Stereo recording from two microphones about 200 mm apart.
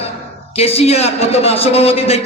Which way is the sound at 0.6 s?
30° left (ahead or behind).